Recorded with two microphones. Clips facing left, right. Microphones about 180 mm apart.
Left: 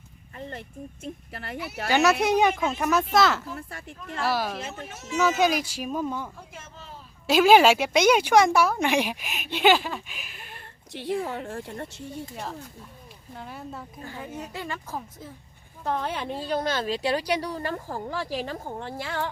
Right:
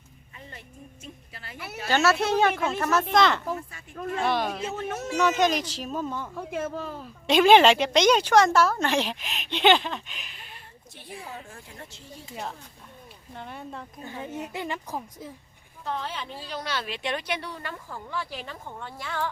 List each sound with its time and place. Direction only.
1.0 s a woman's voice: 60° left (ahead or behind)
1.9 s a woman's voice: 15° left (ahead or behind)
3.7 s a woman's voice: 65° left (ahead or behind)
4.2 s speech: 5° left (ahead or behind)
4.6 s speech: 65° right (ahead or behind)
5.1 s a woman's voice: 5° left (ahead or behind)
6.4 s speech: 60° right (ahead or behind)
7.3 s a woman's voice: 5° left (ahead or behind)
10.5 s a sound: 75° left (ahead or behind)
11.3 s a woman's voice: 65° left (ahead or behind)
12.3 s speech: centre (ahead or behind)
14.0 s a child's voice: 20° right (ahead or behind)
15.8 s speech: 50° left (ahead or behind); by 19.3 s 30° left (ahead or behind)